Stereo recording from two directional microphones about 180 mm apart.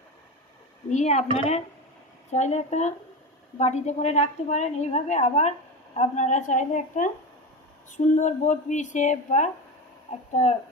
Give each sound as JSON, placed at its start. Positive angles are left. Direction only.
{"t": 0.8, "sound": "a woman's voice", "side_deg": 40}